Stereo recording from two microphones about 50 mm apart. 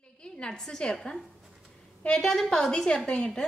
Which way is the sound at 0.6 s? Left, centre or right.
Centre.